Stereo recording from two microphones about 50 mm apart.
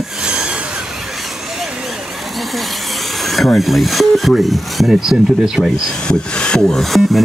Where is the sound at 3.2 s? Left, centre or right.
Centre.